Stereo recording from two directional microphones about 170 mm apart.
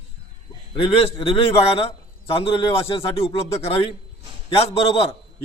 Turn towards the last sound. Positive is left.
turn(degrees=35)  # may be behind; listen again after turning